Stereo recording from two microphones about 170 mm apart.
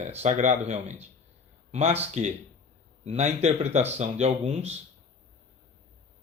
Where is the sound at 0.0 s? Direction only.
40° right (ahead or behind).